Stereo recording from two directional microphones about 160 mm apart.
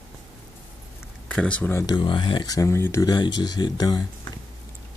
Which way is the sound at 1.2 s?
5° left (ahead or behind).